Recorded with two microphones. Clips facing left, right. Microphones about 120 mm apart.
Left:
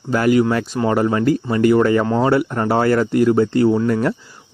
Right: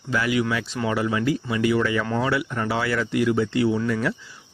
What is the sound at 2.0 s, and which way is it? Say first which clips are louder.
Speech: left 7 dB; 30° left (ahead or behind).